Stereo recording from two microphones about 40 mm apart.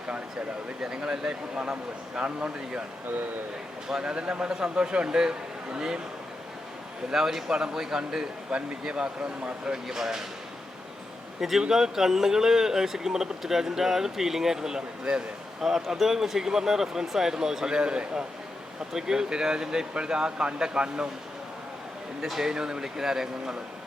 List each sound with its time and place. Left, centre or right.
0.8 s speech: centre
2.2 s speech: right
4.0 s speech: right
7.1 s speech: centre
11.3 s a man's voice: centre
15.6 s speech: centre; by 18.3 s right
18.9 s speech: centre
22.4 s speech: centre